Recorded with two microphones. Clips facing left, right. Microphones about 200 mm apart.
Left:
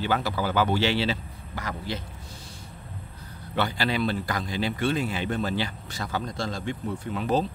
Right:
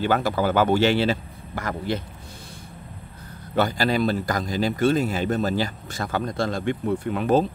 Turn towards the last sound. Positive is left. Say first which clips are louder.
# right 5 dB
turn(degrees=-55)  # may be behind; listen again after turning